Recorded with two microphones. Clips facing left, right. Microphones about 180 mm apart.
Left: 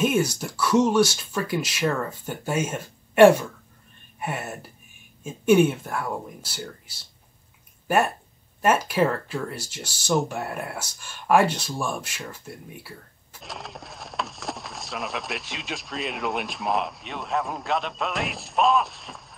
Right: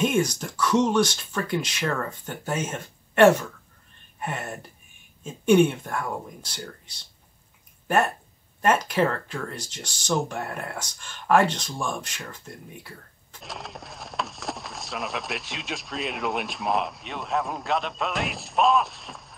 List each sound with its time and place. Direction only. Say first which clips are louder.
0.0 s speech: left 1 dB; 5° left (ahead or behind)